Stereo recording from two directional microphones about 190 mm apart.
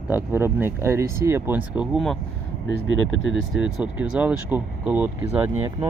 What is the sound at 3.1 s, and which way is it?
Speech, 90° left.